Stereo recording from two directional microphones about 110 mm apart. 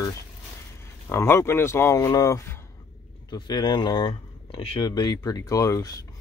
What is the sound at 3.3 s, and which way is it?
Speech, 45° left (ahead or behind).